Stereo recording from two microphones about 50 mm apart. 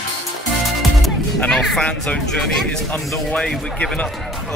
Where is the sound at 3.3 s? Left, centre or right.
Left.